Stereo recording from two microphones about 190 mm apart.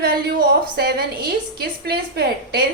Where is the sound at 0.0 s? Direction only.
55° right (ahead or behind).